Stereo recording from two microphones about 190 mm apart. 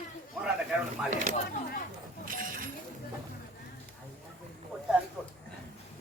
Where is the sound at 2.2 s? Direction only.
45° right (ahead or behind).